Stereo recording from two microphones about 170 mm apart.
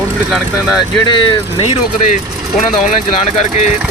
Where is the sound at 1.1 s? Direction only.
30° left (ahead or behind).